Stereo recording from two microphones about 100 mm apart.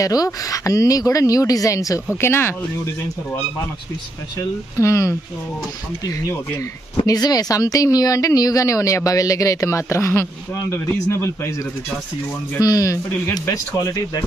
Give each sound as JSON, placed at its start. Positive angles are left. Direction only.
{"t": 0.0, "sound": "a woman's voice", "side_deg": 35}
{"t": 4.4, "sound": "a woman's voice", "side_deg": 30}
{"t": 12.5, "sound": "a woman's voice", "side_deg": 35}